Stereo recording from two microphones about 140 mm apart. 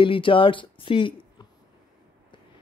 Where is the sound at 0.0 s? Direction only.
40° left (ahead or behind).